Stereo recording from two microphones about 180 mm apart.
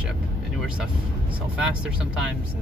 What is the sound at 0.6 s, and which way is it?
Vehicle, 5° right (ahead or behind).